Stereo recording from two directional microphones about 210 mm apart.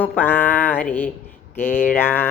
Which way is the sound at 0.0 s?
10° left (ahead or behind).